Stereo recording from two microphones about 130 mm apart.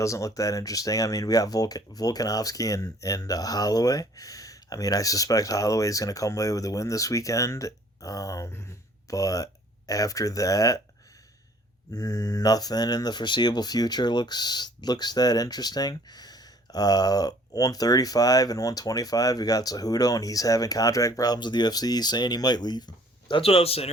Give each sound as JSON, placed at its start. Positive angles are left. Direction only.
{"t": 0.0, "sound": "speech", "side_deg": 25}
{"t": 11.9, "sound": "speech", "side_deg": 25}
{"t": 23.3, "sound": "a man's voice", "side_deg": 50}